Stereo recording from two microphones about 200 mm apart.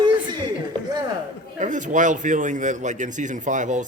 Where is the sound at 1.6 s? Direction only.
40° right (ahead or behind).